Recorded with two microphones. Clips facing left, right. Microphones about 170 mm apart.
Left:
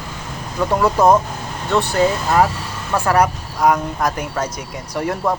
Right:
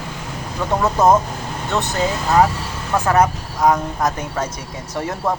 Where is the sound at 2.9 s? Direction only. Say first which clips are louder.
Even; 20° right (ahead or behind).